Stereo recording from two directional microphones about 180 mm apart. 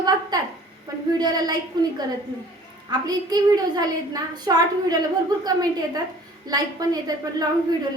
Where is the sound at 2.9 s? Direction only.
20° right (ahead or behind).